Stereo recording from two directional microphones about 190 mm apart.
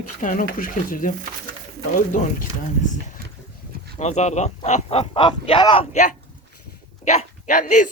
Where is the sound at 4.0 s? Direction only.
35° left (ahead or behind).